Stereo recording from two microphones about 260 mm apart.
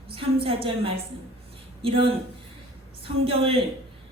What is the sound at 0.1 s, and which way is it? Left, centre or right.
A man's voice, right.